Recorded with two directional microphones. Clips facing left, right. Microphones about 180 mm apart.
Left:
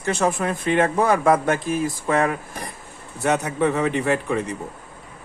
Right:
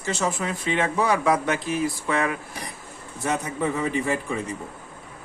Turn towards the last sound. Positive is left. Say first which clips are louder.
# left 4 dB
turn(degrees=70)  # may be behind; listen again after turning